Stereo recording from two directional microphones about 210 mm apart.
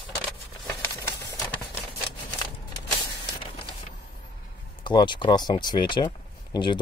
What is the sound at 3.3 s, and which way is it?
Spray, 20° left (ahead or behind).